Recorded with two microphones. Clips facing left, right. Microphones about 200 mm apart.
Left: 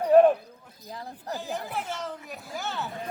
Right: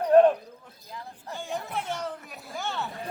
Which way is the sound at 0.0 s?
5° left (ahead or behind).